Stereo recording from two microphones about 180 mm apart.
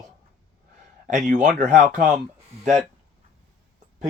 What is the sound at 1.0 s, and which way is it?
Speech, 45° right (ahead or behind).